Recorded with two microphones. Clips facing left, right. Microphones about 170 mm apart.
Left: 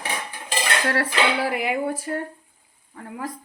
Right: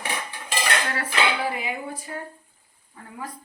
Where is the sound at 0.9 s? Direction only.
75° left (ahead or behind).